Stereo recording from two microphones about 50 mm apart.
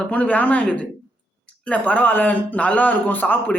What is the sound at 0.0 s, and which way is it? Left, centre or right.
A man's voice, left.